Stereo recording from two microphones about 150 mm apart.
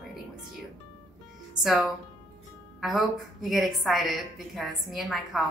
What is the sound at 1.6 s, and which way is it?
A woman's voice, centre (ahead or behind).